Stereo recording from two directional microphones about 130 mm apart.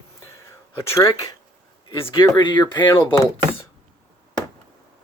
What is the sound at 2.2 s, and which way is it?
Speech, 35° left (ahead or behind).